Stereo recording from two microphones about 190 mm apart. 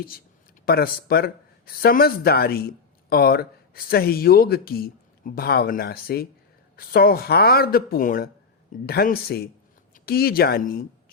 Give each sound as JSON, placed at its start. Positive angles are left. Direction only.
{"t": 0.6, "sound": "speech", "side_deg": 55}